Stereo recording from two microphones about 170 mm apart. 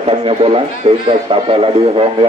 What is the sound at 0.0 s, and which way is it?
A man's voice, 35° right (ahead or behind).